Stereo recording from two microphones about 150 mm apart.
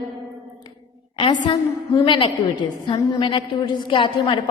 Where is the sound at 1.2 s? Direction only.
30° left (ahead or behind).